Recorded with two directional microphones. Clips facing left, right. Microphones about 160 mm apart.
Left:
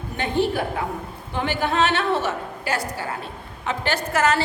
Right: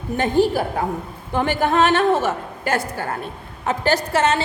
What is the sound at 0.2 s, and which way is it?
A woman's voice, 40° right (ahead or behind).